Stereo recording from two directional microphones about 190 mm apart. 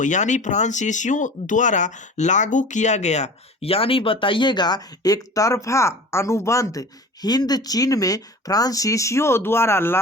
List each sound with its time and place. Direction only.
0.0 s speech: 40° left (ahead or behind); by 10.0 s 15° left (ahead or behind)